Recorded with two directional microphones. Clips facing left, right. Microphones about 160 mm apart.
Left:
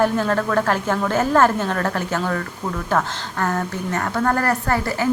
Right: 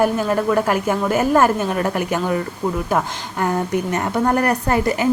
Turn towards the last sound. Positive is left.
turn(degrees=-20)  # may be behind; listen again after turning